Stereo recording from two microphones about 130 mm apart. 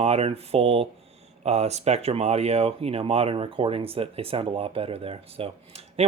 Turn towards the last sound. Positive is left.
turn(degrees=-50)  # may be behind; listen again after turning